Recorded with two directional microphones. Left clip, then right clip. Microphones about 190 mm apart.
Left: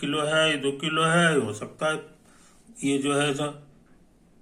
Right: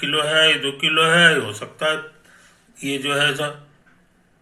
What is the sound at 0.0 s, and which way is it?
A man's voice, 10° left (ahead or behind).